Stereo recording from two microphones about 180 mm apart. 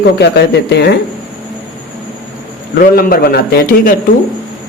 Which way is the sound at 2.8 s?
55° left (ahead or behind).